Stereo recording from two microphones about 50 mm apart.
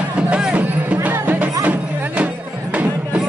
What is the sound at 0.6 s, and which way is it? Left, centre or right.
Music, right.